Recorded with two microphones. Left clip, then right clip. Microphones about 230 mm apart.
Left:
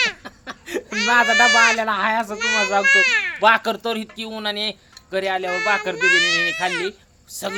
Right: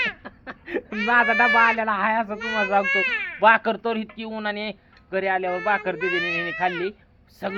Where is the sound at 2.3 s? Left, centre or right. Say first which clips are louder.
Left 3 dB; left.